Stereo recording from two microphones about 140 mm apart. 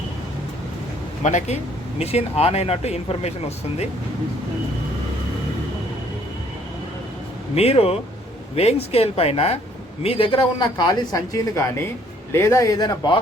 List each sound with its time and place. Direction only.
1.2 s speech: 55° left (ahead or behind)
2.0 s speech: 45° left (ahead or behind)
7.5 s a man's voice: 45° left (ahead or behind); by 13.1 s 30° left (ahead or behind)